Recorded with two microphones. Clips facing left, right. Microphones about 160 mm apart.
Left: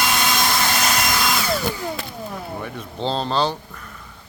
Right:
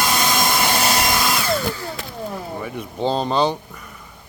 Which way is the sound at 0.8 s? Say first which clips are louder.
Right 2 dB; 30° right (ahead or behind).